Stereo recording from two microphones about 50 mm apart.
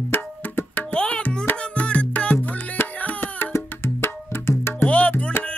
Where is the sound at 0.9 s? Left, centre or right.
Left.